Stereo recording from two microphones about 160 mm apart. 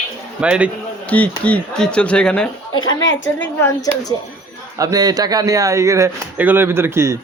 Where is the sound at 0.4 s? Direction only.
5° right (ahead or behind).